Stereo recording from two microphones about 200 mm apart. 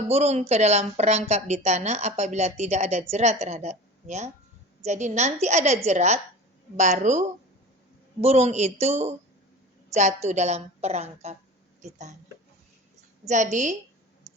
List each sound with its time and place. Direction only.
0.1 s speech: 35° right (ahead or behind)
13.2 s speech: 35° right (ahead or behind)